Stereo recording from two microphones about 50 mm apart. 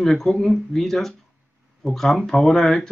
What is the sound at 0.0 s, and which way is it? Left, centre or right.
Speech, centre.